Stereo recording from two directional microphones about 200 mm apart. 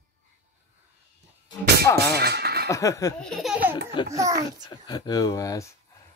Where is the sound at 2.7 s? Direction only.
15° left (ahead or behind).